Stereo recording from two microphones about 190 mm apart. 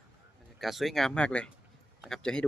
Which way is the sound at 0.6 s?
Centre (ahead or behind).